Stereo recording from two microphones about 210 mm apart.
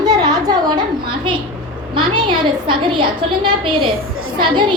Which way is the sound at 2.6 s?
25° right (ahead or behind).